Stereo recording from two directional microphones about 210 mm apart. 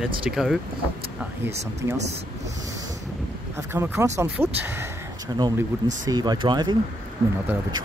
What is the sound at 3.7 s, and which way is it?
Speech, 10° right (ahead or behind).